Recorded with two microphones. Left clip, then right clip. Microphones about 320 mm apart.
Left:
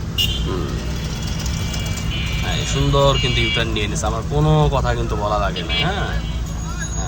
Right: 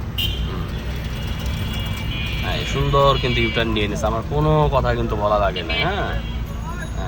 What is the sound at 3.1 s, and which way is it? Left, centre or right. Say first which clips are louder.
Speech: left 1 dB; centre.